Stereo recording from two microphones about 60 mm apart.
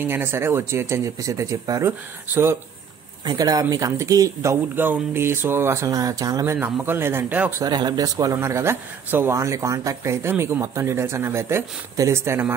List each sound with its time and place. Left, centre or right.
0.0 s speech: right
1.2 s speech: right
1.9 s speech: right
3.3 s speech: right
4.0 s speech: right
4.7 s speech: right
5.9 s speech: right
6.4 s speech: right
7.2 s speech: right
7.6 s speech: right
8.4 s speech: right
10.2 s speech: right
10.6 s speech: right